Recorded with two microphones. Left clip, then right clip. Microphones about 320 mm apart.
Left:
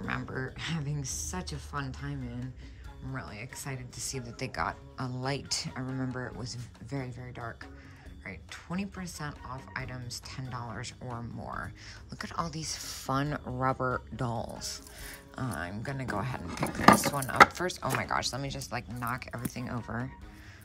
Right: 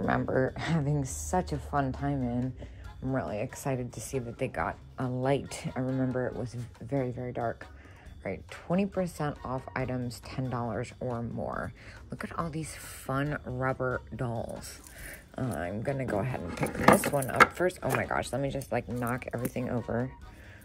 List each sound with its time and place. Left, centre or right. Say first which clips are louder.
0.0 s speech: right 8 dB; centre
1.1 s a woman's voice: right 8 dB; centre
1.4 s speech: right 7 dB; centre
3.9 s speech: right 3 dB; centre
4.4 s speech: even; centre